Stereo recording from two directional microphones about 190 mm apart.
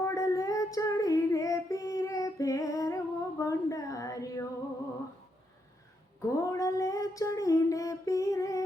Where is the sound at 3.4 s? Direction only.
15° left (ahead or behind).